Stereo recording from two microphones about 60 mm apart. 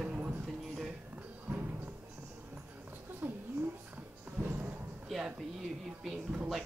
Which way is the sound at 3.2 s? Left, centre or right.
Right.